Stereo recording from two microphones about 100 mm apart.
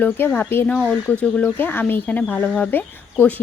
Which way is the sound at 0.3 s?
20° left (ahead or behind).